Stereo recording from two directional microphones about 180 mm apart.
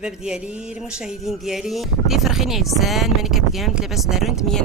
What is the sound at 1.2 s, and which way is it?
Speech, centre (ahead or behind).